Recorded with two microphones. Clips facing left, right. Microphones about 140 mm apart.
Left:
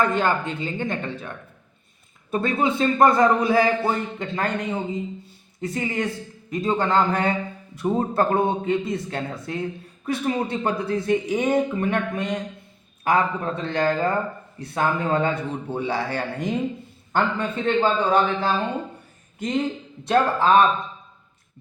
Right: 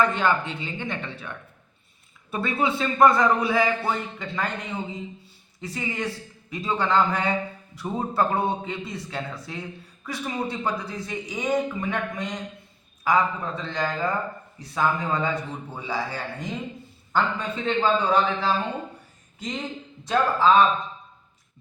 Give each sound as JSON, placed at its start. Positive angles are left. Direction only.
{"t": 0.0, "sound": "a man's voice", "side_deg": 45}
{"t": 2.3, "sound": "a man's voice", "side_deg": 45}
{"t": 5.5, "sound": "a man's voice", "side_deg": 50}
{"t": 17.1, "sound": "speech", "side_deg": 55}